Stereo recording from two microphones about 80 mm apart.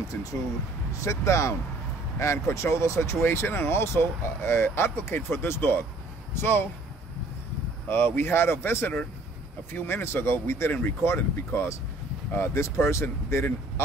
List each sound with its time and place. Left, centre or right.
1.0 s speech: left
8.2 s speech: left